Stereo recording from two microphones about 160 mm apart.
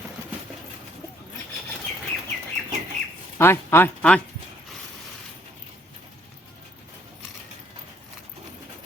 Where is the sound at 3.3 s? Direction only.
15° left (ahead or behind).